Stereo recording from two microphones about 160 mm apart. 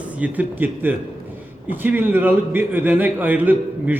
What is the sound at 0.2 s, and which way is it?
A man's voice, 10° right (ahead or behind).